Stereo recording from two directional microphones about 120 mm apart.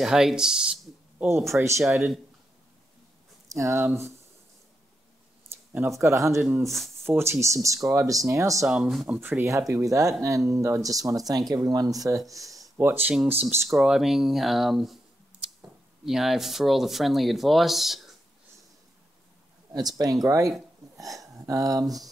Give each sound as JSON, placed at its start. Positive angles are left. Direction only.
{"t": 0.0, "sound": "speech", "side_deg": -5}
{"t": 3.4, "sound": "speech", "side_deg": -25}
{"t": 5.8, "sound": "speech", "side_deg": -25}
{"t": 8.6, "sound": "speech", "side_deg": -5}
{"t": 9.4, "sound": "speech", "side_deg": -25}
{"t": 12.4, "sound": "a sound", "side_deg": 0}
{"t": 12.7, "sound": "speech", "side_deg": -20}
{"t": 13.7, "sound": "speech", "side_deg": -5}
{"t": 16.1, "sound": "speech", "side_deg": -5}
{"t": 19.7, "sound": "speech", "side_deg": -35}